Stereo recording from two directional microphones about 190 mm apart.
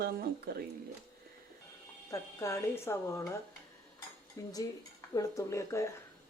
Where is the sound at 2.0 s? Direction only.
15° left (ahead or behind).